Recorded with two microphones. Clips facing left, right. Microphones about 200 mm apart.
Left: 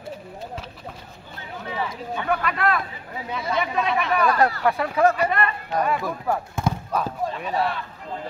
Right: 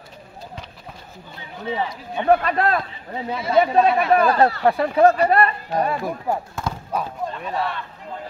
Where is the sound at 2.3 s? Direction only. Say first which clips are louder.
Right 6 dB; 35° right (ahead or behind).